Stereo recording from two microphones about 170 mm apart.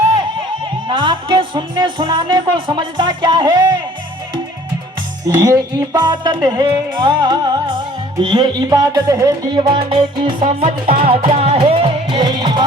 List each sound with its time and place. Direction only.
0.9 s speech: 30° right (ahead or behind)
5.4 s speech: 20° right (ahead or behind)
9.6 s speech: 30° right (ahead or behind)
10.4 s music: 35° right (ahead or behind)